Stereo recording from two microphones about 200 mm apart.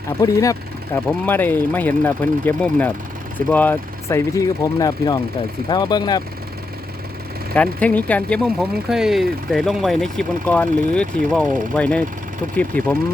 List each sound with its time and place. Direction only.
0.2 s speech: 15° left (ahead or behind)
7.5 s speech: 5° left (ahead or behind)